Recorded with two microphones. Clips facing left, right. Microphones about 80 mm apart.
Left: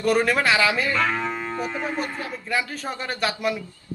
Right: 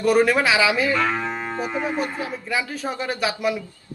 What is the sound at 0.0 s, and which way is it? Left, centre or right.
Speech, centre.